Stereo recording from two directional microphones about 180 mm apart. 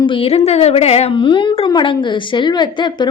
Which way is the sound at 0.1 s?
35° left (ahead or behind).